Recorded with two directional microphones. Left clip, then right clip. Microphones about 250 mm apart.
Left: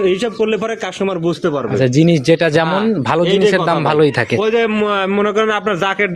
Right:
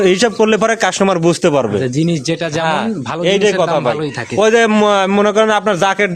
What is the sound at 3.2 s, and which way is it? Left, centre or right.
Speech, right.